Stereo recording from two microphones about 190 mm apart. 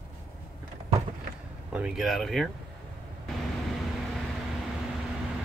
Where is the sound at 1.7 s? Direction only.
5° right (ahead or behind).